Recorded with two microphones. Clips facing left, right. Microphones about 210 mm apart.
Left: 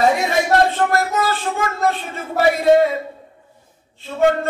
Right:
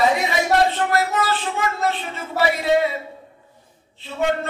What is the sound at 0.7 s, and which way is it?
Speech, 45° left (ahead or behind).